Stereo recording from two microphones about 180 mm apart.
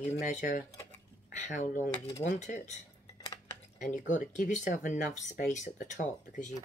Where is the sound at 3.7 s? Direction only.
45° left (ahead or behind).